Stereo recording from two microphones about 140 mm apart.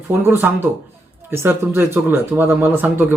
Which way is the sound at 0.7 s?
15° right (ahead or behind).